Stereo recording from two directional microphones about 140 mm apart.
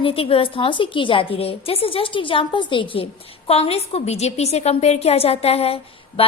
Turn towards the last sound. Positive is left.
turn(degrees=45)  # may be behind; listen again after turning